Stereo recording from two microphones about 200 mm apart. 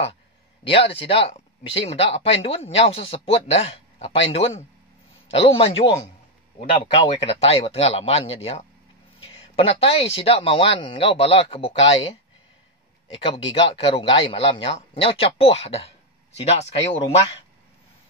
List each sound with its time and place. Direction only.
0.7 s speech: 25° left (ahead or behind)
7.2 s speech: 30° left (ahead or behind)
9.2 s a sound: 30° left (ahead or behind)
10.1 s speech: 30° left (ahead or behind)